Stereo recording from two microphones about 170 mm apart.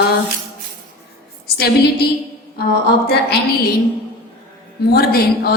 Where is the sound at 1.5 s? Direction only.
70° left (ahead or behind).